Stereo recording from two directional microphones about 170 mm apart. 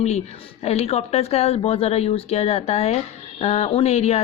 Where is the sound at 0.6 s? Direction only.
40° left (ahead or behind).